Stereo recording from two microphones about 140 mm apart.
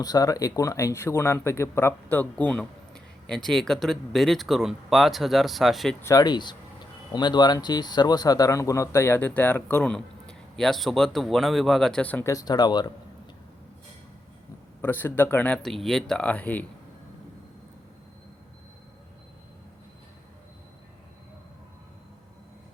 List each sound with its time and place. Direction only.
0.0 s speech: 25° left (ahead or behind); by 6.0 s centre (ahead or behind)
6.0 s speech: 25° left (ahead or behind)
12.3 s speech: 25° left (ahead or behind)
14.8 s speech: 15° left (ahead or behind)